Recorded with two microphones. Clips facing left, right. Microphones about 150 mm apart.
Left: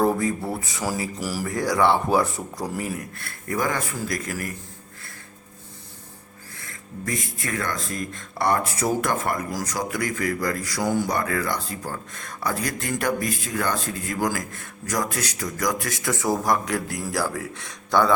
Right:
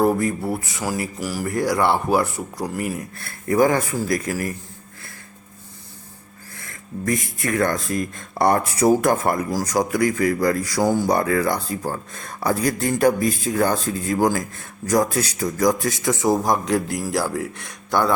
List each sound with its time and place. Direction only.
0.0 s speech: 10° right (ahead or behind)
3.2 s speech: 35° right (ahead or behind)
7.4 s speech: 45° right (ahead or behind); by 18.1 s 15° right (ahead or behind)